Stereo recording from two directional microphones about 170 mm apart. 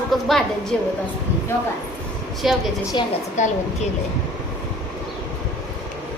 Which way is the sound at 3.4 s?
45° left (ahead or behind).